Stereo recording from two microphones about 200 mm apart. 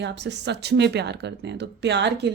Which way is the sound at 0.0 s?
60° right (ahead or behind).